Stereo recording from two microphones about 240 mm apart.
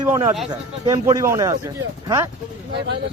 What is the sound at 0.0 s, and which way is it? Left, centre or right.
Speech, centre.